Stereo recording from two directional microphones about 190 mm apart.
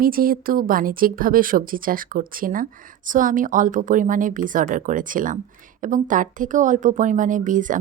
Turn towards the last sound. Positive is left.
turn(degrees=-45)  # may be behind; listen again after turning